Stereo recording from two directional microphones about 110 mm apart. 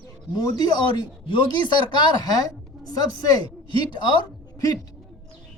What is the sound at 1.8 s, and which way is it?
A woman's voice, 45° left (ahead or behind).